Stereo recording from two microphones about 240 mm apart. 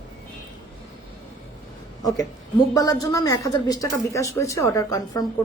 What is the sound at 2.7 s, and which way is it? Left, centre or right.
Speech, centre.